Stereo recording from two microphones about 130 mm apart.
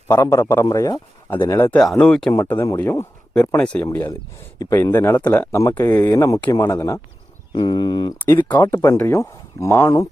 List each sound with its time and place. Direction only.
0.1 s speech: 20° left (ahead or behind)
1.8 s speech: 5° left (ahead or behind)
2.3 s speech: 20° left (ahead or behind)
3.6 s speech: 10° left (ahead or behind); by 8.1 s 35° left (ahead or behind)
8.2 s speech: 15° left (ahead or behind)
8.4 s speech: 30° left (ahead or behind)
8.8 s speech: 20° left (ahead or behind)